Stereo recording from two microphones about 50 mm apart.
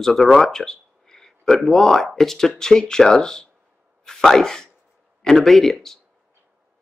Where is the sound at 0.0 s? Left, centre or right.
Centre.